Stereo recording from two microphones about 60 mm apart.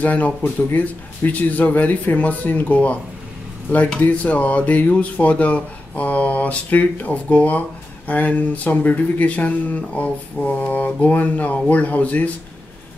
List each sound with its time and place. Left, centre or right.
0.0 s speech: left
4.0 s speech: left